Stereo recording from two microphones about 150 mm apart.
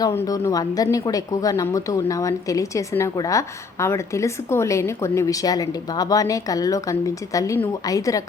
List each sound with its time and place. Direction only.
0.0 s speech: 20° left (ahead or behind)